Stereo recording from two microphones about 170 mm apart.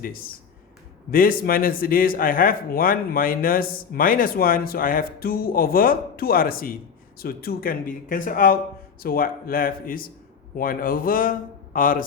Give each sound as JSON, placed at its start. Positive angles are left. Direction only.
{"t": 0.0, "sound": "a man's voice", "side_deg": 60}